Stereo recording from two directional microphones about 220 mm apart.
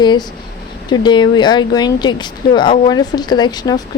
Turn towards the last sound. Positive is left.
turn(degrees=20)  # may be behind; listen again after turning